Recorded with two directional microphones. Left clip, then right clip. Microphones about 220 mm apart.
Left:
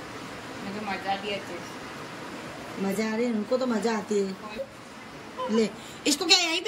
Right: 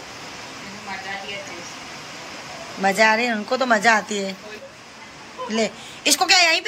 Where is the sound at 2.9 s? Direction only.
5° right (ahead or behind).